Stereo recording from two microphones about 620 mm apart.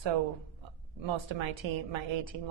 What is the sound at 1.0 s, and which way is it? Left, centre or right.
A woman's voice, right.